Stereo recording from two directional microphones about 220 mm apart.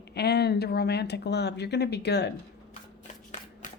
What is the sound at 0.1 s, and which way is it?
Speech, 50° left (ahead or behind).